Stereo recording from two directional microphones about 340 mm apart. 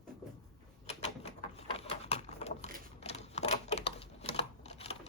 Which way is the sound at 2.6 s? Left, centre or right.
Right.